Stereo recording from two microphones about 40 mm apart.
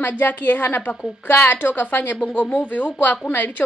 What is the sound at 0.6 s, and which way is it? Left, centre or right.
A woman's voice, left.